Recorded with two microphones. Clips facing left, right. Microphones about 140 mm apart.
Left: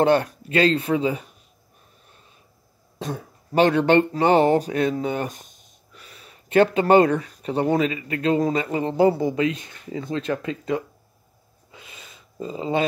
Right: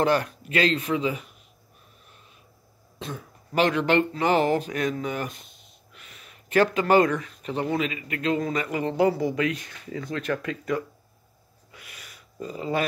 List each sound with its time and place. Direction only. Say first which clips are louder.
0.0 s speech: left 4 dB; 30° left (ahead or behind)
3.0 s speech: left 5 dB; 35° left (ahead or behind)
11.7 s a sound: left 3 dB; 25° left (ahead or behind)